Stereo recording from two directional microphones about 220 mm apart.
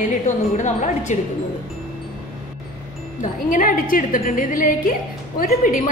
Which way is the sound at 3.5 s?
40° left (ahead or behind).